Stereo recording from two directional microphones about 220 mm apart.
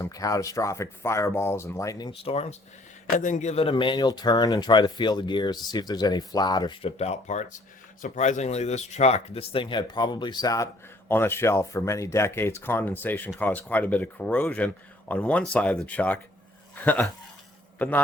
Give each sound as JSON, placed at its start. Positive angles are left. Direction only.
{"t": 0.0, "sound": "a man's voice", "side_deg": 15}